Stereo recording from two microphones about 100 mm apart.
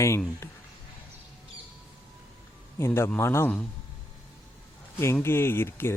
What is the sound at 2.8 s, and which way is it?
Speech, 25° left (ahead or behind).